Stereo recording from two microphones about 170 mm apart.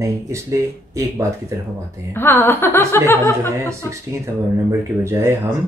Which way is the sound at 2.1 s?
15° left (ahead or behind).